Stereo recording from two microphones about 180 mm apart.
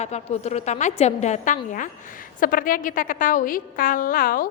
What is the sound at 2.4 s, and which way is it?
A woman's voice, 50° left (ahead or behind).